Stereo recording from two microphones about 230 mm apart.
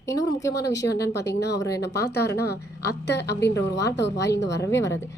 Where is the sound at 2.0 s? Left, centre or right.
Left.